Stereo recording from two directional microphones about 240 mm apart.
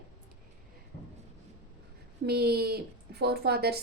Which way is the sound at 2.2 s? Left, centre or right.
Right.